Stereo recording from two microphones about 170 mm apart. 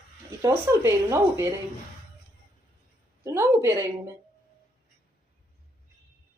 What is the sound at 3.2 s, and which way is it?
Speech, 15° right (ahead or behind).